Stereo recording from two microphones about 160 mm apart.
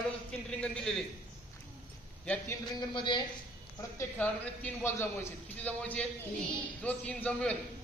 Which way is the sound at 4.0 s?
10° left (ahead or behind).